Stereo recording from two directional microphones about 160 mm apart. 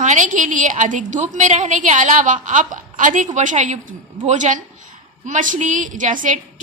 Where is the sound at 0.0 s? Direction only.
50° right (ahead or behind).